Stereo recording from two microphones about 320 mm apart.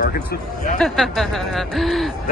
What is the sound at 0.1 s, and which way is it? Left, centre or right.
Speech, left.